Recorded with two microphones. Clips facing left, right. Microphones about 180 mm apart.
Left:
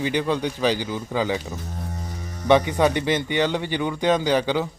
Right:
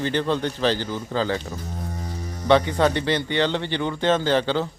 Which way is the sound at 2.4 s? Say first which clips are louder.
Left 1 dB; 15° left (ahead or behind).